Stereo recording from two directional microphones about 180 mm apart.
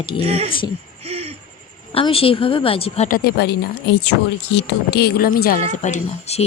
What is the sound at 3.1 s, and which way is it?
Speech, 60° left (ahead or behind).